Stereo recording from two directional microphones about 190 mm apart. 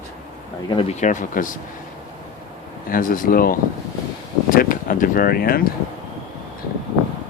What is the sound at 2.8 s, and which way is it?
Speech, 45° left (ahead or behind).